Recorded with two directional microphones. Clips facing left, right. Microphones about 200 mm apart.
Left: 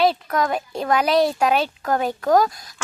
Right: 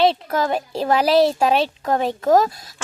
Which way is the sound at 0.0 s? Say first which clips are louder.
Right 1 dB; 25° right (ahead or behind).